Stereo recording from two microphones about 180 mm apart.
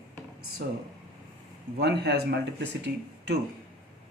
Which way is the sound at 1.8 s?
65° right (ahead or behind).